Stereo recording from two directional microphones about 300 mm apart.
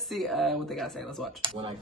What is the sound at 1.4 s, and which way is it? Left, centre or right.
Speech, centre.